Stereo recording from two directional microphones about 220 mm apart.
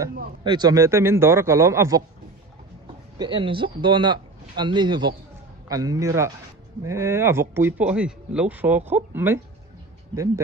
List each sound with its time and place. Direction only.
0.0 s speech: 20° right (ahead or behind)
3.2 s speech: 20° right (ahead or behind)